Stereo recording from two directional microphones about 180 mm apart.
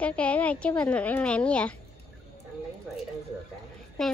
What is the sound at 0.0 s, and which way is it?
A woman's voice, 5° left (ahead or behind).